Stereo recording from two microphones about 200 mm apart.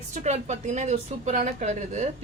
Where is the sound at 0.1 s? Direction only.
35° right (ahead or behind).